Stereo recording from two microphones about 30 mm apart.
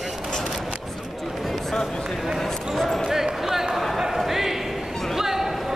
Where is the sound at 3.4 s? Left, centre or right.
Centre.